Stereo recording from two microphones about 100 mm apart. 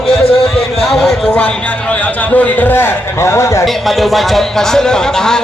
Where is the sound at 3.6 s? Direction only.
Centre (ahead or behind).